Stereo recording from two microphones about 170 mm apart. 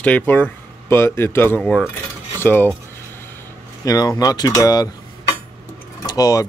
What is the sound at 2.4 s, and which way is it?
Cutlery, 10° left (ahead or behind).